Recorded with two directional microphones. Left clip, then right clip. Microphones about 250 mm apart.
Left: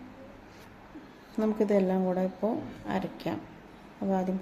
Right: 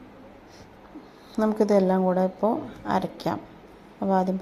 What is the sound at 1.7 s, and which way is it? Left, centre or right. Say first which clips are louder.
Speech: right 6 dB; centre.